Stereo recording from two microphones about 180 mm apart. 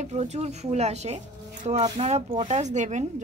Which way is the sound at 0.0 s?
40° right (ahead or behind).